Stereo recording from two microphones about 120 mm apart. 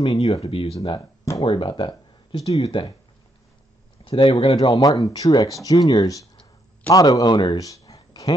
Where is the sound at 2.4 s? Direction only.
60° left (ahead or behind).